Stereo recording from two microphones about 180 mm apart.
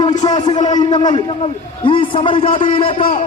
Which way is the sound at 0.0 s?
20° left (ahead or behind).